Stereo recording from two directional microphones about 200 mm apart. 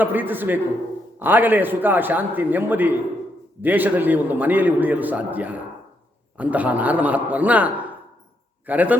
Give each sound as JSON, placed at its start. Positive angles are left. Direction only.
{"t": 0.0, "sound": "a man's voice", "side_deg": -10}